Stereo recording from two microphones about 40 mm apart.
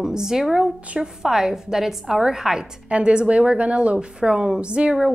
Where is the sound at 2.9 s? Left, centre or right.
Right.